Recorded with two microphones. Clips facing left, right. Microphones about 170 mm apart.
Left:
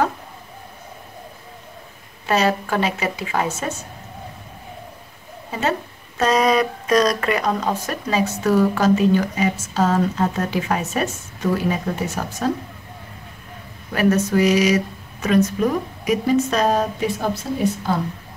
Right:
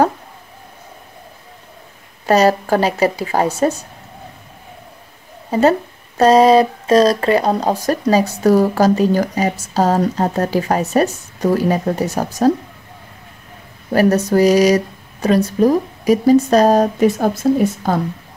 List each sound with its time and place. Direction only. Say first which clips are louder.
2.2 s speech: right 6 dB; 40° right (ahead or behind)
5.5 s speech: right 9 dB; 40° right (ahead or behind)
13.9 s speech: right 4 dB; 35° right (ahead or behind)